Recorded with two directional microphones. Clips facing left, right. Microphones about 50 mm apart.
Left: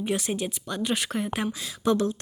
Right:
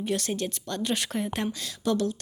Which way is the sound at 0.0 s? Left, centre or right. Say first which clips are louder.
Left 1 dB; centre.